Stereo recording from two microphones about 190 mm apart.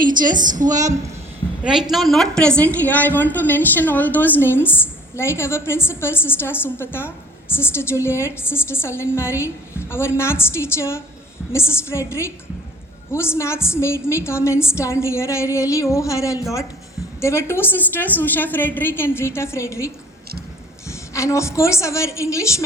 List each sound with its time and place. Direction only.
0.0 s a woman's voice: 45° right (ahead or behind)
0.7 s a woman's voice: 20° right (ahead or behind)
1.9 s a woman's voice: centre (ahead or behind); by 22.6 s 15° left (ahead or behind)